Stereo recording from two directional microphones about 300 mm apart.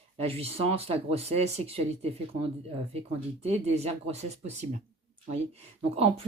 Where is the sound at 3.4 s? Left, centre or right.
Right.